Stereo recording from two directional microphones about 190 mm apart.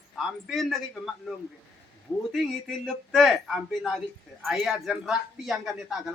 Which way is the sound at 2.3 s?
Centre (ahead or behind).